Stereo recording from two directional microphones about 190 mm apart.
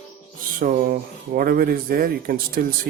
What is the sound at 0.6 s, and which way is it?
Speech, 45° right (ahead or behind).